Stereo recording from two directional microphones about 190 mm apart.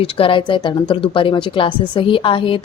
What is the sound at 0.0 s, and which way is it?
A woman's voice, 30° left (ahead or behind).